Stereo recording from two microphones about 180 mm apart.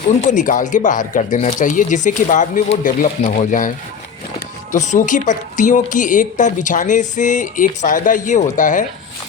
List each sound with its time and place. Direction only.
0.2 s speech: 45° left (ahead or behind)